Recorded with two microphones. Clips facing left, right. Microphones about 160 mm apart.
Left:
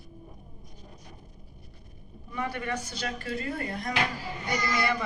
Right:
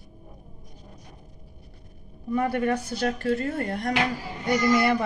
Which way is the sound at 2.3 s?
45° right (ahead or behind).